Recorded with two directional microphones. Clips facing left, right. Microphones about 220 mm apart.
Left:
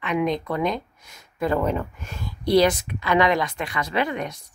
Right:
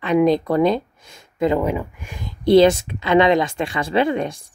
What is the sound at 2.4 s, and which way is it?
Speech, 25° right (ahead or behind).